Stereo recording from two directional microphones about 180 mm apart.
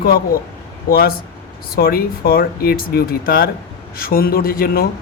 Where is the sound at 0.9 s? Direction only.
55° left (ahead or behind).